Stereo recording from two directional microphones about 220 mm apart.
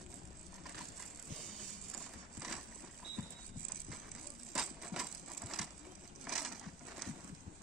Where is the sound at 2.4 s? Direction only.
Centre (ahead or behind).